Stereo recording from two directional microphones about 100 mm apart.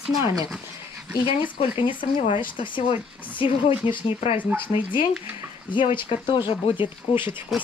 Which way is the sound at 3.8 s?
70° left (ahead or behind).